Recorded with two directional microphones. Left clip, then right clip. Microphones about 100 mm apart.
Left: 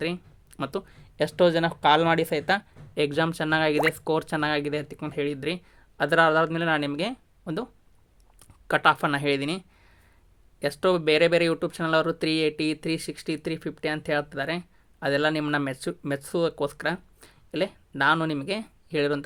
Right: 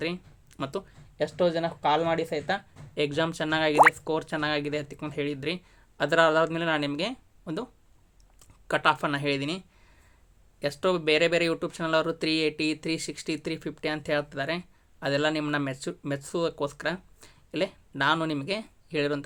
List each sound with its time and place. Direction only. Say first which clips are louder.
0.0 s speech: left 2 dB; 30° left (ahead or behind)
0.9 s speech: left 3 dB; 90° left
2.9 s speech: left 2 dB; 40° left (ahead or behind)
4.4 s speech: left 2 dB; 35° left (ahead or behind)